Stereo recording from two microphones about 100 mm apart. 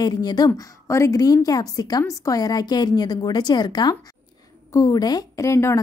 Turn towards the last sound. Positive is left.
turn(degrees=30)  # may be behind; listen again after turning